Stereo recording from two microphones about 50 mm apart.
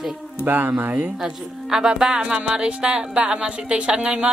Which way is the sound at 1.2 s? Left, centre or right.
Centre.